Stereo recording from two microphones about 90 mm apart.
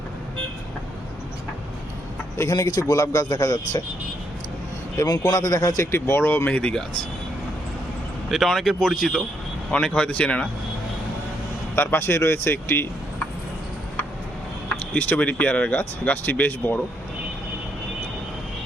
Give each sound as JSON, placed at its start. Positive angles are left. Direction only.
{"t": 2.4, "sound": "speech", "side_deg": 40}
{"t": 5.2, "sound": "speech", "side_deg": 40}
{"t": 8.3, "sound": "a man's voice", "side_deg": 0}
{"t": 11.8, "sound": "speech", "side_deg": 25}
{"t": 14.9, "sound": "speech", "side_deg": 20}